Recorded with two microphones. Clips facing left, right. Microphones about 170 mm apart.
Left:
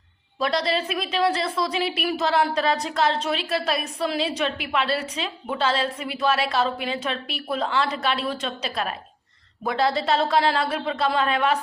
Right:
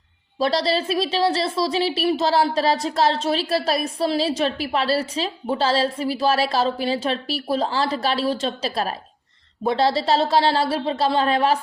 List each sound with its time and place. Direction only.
0.3 s a woman's voice: 30° right (ahead or behind)